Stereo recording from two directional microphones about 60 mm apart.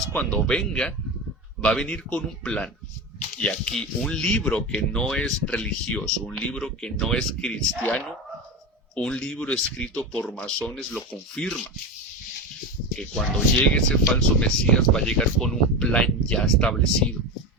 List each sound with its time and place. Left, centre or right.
0.1 s speech: centre
9.0 s speech: centre
13.7 s speech: centre